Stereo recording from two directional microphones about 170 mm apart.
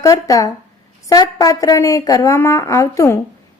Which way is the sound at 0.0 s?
20° left (ahead or behind).